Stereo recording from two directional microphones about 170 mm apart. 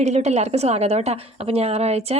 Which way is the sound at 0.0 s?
40° right (ahead or behind).